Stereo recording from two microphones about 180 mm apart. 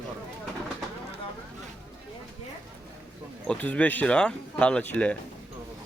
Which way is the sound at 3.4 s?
5° left (ahead or behind).